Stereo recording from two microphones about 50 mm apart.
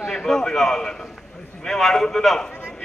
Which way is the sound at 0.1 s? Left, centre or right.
Centre.